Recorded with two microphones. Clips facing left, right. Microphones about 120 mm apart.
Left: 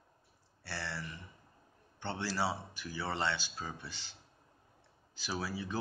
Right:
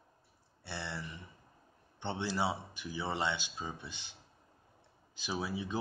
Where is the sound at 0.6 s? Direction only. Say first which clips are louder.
Even; 20° right (ahead or behind).